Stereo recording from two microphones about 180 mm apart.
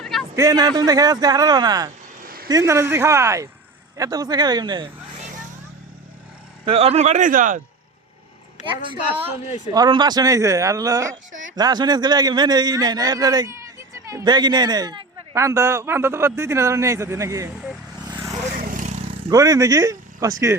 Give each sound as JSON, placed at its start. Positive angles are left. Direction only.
{"t": 0.0, "sound": "a sound", "side_deg": 0}
{"t": 0.3, "sound": "a man's voice", "side_deg": -20}
{"t": 2.2, "sound": "a sound", "side_deg": -55}
{"t": 2.5, "sound": "a man's voice", "side_deg": -15}
{"t": 6.7, "sound": "speech", "side_deg": -35}
{"t": 8.6, "sound": "speech", "side_deg": 40}
{"t": 9.7, "sound": "a man's voice", "side_deg": -25}
{"t": 18.0, "sound": "vehicle", "side_deg": -20}
{"t": 18.7, "sound": "vehicle", "side_deg": -45}
{"t": 19.3, "sound": "a man's voice", "side_deg": -20}